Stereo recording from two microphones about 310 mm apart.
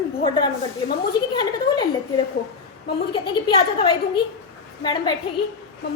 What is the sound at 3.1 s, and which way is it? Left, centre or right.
Speech, centre.